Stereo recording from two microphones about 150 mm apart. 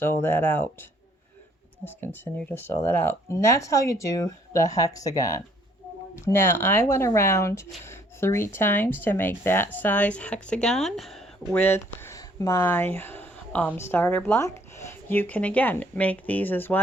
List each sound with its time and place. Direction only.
0.0 s speech: 15° left (ahead or behind)
11.5 s speech: 15° left (ahead or behind)
13.0 s a sound: 15° left (ahead or behind)
13.7 s speech: 15° left (ahead or behind)